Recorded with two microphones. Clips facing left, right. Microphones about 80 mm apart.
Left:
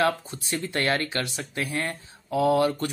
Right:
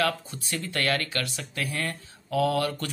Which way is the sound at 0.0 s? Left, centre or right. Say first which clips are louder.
Left 3 dB; left.